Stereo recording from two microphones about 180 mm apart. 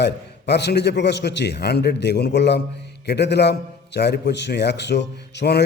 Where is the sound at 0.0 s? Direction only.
70° left (ahead or behind).